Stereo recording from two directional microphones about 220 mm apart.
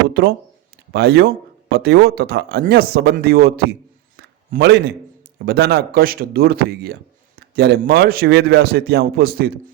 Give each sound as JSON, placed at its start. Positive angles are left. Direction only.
{"t": 0.2, "sound": "a man's voice", "side_deg": -45}
{"t": 4.2, "sound": "a sound", "side_deg": -50}
{"t": 5.5, "sound": "a man's voice", "side_deg": -45}